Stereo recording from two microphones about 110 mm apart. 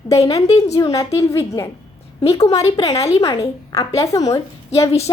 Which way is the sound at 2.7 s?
35° left (ahead or behind).